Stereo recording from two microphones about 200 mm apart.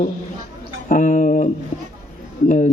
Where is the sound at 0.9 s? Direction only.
45° left (ahead or behind).